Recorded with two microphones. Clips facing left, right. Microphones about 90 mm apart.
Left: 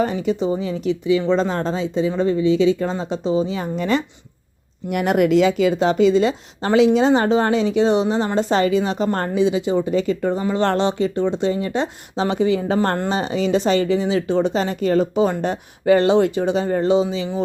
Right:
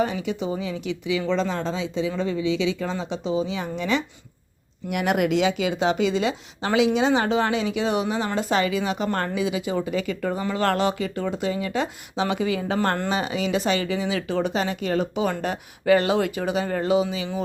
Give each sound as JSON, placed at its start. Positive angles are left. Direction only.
{"t": 0.0, "sound": "speech", "side_deg": 40}